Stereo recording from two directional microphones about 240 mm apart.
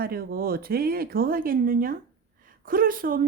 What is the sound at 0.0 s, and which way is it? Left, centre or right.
Speech, right.